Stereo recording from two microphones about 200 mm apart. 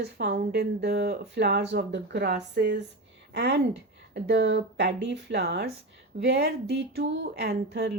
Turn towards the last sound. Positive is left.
turn(degrees=-55)  # may be behind; listen again after turning